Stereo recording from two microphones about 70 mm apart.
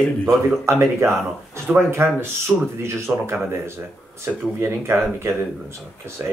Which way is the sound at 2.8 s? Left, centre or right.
Right.